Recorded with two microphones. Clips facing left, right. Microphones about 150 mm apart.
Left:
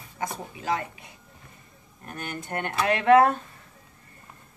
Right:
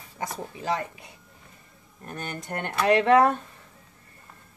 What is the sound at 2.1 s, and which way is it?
Speech, 35° right (ahead or behind).